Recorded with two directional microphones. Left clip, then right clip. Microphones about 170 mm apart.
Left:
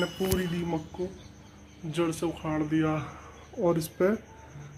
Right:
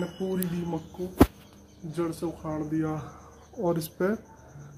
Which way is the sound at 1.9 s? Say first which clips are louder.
Left 2 dB; 25° left (ahead or behind).